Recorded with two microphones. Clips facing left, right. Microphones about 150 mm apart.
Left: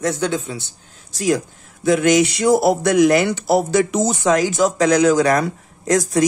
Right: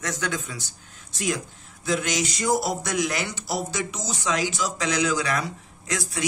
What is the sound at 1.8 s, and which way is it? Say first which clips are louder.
Speech: left 11 dB; 55° left (ahead or behind).